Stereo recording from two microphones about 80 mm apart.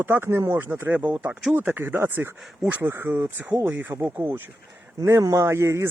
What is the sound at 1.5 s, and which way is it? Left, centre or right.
Speech, right.